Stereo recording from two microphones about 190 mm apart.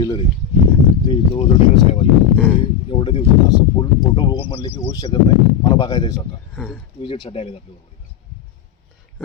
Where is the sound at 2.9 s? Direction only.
25° left (ahead or behind).